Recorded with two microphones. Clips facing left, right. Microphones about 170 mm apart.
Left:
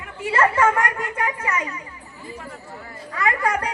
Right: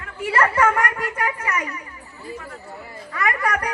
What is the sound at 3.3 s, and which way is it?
Speech, 25° left (ahead or behind).